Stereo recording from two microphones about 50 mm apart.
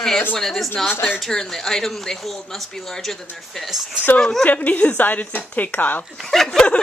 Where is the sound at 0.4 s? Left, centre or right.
Centre.